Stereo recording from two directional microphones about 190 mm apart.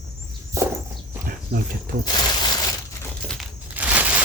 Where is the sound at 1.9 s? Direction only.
40° right (ahead or behind).